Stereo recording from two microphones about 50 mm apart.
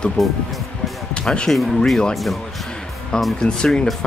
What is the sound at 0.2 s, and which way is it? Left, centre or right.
Speech, centre.